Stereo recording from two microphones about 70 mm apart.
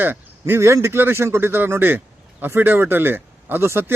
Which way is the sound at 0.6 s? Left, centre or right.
Right.